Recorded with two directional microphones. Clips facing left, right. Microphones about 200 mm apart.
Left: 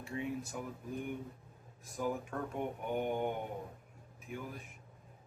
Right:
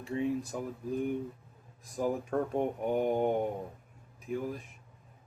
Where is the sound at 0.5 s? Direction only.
35° right (ahead or behind).